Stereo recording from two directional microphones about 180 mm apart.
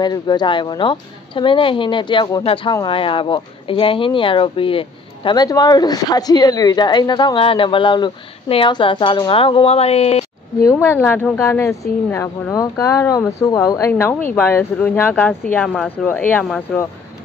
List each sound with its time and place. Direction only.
0.0 s a woman's voice: 25° left (ahead or behind)
10.6 s speech: 15° left (ahead or behind)